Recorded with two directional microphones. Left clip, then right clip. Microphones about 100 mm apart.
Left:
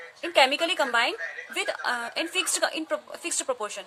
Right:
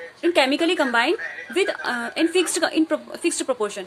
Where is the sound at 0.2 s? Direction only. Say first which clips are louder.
Right 2 dB; 40° left (ahead or behind).